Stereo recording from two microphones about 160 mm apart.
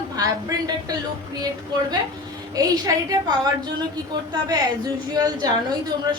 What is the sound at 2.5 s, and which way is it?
A woman's voice, 25° right (ahead or behind).